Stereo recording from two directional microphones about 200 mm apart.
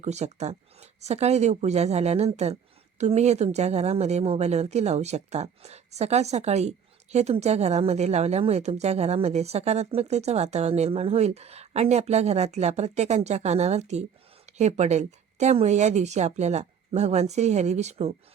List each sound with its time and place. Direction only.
0.0 s a woman's voice: 35° right (ahead or behind)